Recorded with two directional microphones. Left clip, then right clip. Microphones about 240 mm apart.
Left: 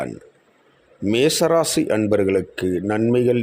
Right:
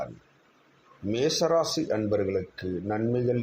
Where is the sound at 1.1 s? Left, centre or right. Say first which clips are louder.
Left 7 dB; left.